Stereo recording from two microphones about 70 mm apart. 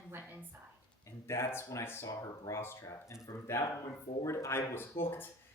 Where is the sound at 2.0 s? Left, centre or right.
Left.